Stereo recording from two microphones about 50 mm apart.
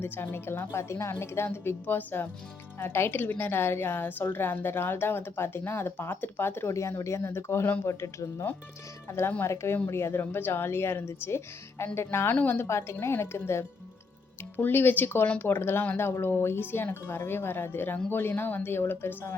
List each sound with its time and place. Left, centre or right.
0.0 s a woman's voice: left
1.6 s a woman's voice: left
6.7 s a woman's voice: left
12.3 s a woman's voice: left
12.6 s speech: left
14.5 s a woman's voice: left